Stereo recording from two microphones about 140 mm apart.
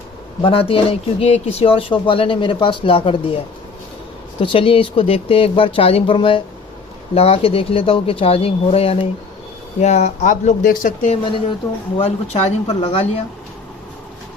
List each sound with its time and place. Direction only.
0.4 s speech: 40° left (ahead or behind)
4.4 s speech: 40° left (ahead or behind); by 10.5 s 55° left (ahead or behind)
10.7 s speech: 70° left (ahead or behind)
11.9 s speech: 50° left (ahead or behind)